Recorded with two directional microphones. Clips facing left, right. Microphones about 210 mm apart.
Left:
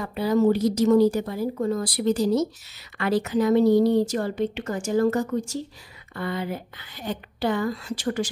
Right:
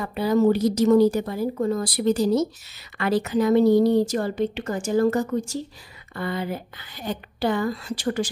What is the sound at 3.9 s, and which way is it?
A woman's voice, 35° right (ahead or behind).